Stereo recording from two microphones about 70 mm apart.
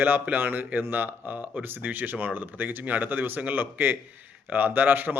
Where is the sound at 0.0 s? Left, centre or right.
Right.